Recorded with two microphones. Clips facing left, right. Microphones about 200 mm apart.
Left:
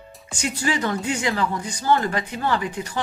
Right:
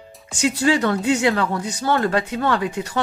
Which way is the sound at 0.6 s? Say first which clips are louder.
Right 5 dB; 65° right (ahead or behind).